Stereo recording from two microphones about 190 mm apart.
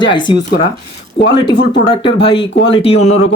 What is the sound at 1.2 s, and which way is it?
Speech, 65° left (ahead or behind).